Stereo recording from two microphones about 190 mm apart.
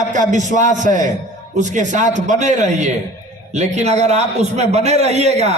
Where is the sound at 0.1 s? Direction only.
40° right (ahead or behind).